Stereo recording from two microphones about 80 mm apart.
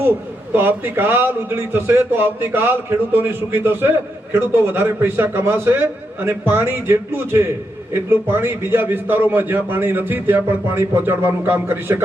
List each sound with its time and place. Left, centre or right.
0.5 s a man's voice: right